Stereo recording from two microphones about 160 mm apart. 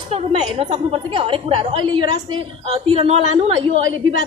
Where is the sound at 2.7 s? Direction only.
40° right (ahead or behind).